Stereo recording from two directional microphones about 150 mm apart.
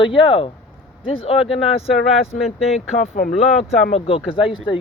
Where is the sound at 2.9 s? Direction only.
45° left (ahead or behind).